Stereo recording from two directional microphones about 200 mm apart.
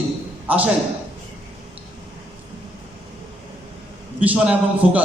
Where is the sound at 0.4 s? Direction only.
5° right (ahead or behind).